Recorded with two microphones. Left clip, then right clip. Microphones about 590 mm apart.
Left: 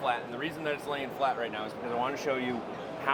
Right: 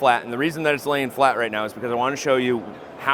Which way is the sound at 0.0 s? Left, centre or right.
Right.